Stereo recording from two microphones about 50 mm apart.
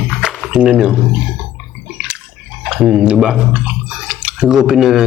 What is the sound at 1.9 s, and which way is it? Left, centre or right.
Bathtub, centre.